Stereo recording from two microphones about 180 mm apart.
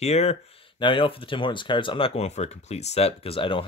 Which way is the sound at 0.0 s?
35° left (ahead or behind).